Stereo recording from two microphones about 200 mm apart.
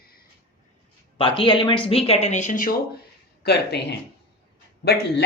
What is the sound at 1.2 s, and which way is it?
Speech, 25° left (ahead or behind).